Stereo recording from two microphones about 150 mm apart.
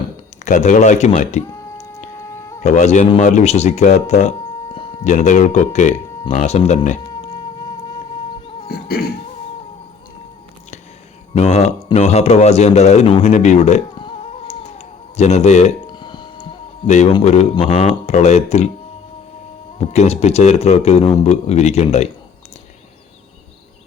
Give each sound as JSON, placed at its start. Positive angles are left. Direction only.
{"t": 0.4, "sound": "speech", "side_deg": 55}
{"t": 1.5, "sound": "a sound", "side_deg": 20}
{"t": 2.6, "sound": "speech", "side_deg": 50}
{"t": 8.4, "sound": "a sound", "side_deg": 40}
{"t": 8.6, "sound": "cough", "side_deg": 90}
{"t": 11.3, "sound": "speech", "side_deg": 50}
{"t": 13.9, "sound": "a sound", "side_deg": 35}
{"t": 15.9, "sound": "music", "side_deg": 30}
{"t": 16.8, "sound": "speech", "side_deg": 50}
{"t": 19.9, "sound": "speech", "side_deg": 45}